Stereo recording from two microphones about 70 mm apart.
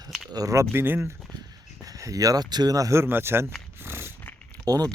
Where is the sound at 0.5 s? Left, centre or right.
Right.